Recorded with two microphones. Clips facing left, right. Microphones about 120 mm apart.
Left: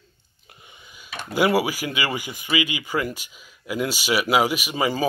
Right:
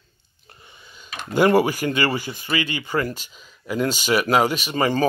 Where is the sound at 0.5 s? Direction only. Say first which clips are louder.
Right 1 dB; 15° left (ahead or behind).